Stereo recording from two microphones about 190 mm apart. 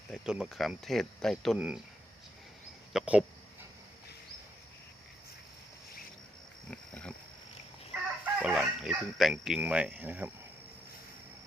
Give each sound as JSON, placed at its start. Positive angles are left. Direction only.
{"t": 0.1, "sound": "speech", "side_deg": -5}
{"t": 2.9, "sound": "speech", "side_deg": -5}
{"t": 6.7, "sound": "pig", "side_deg": 5}
{"t": 8.2, "sound": "speech", "side_deg": -5}